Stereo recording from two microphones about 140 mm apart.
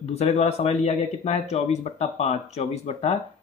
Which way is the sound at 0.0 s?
50° left (ahead or behind).